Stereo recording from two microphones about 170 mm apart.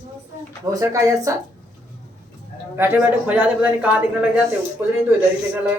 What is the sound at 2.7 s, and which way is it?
Speech, 10° right (ahead or behind).